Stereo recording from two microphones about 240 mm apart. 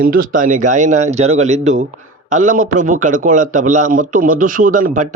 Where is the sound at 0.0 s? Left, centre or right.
Right.